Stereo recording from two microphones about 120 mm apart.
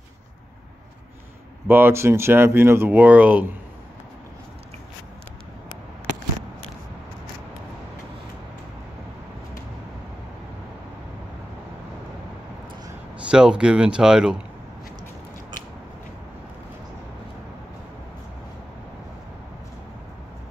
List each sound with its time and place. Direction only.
1.7 s speech: 20° right (ahead or behind)
13.3 s speech: 10° right (ahead or behind)